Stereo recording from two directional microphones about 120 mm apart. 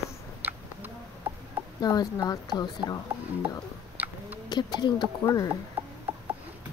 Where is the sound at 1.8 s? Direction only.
35° left (ahead or behind).